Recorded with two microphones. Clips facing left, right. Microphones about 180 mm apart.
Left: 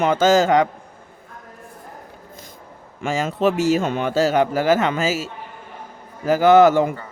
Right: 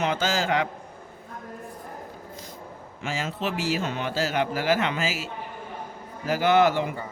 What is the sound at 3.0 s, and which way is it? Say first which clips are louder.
Speech: left 10 dB; 50° left (ahead or behind).